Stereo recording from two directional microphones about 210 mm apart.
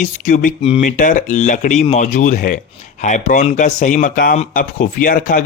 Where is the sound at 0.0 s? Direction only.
35° left (ahead or behind).